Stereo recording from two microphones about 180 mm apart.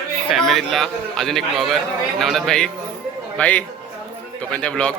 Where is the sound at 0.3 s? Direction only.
Centre (ahead or behind).